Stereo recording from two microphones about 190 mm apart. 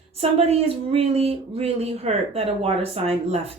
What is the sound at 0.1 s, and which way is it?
Speech, 30° right (ahead or behind).